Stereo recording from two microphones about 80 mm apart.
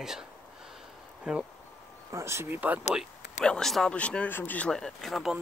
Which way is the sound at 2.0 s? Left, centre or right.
Right.